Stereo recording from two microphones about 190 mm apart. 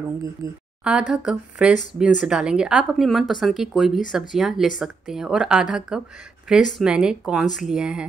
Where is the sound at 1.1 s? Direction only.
5° right (ahead or behind).